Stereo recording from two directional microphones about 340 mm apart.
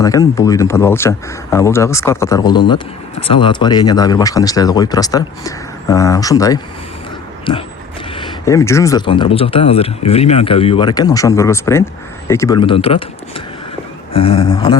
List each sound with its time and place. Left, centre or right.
0.0 s speech: centre